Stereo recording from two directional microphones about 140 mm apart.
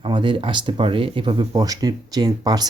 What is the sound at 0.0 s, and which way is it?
Speech, 35° right (ahead or behind).